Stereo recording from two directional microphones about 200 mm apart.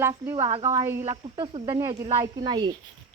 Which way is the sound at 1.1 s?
25° right (ahead or behind).